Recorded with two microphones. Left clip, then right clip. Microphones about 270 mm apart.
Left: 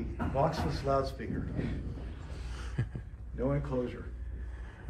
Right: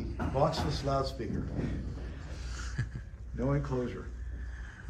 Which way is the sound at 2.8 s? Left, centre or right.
Centre.